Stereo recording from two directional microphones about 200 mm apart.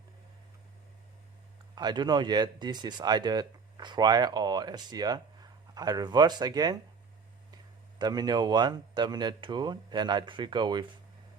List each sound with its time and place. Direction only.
1.7 s speech: 20° right (ahead or behind)
7.9 s speech: 20° right (ahead or behind)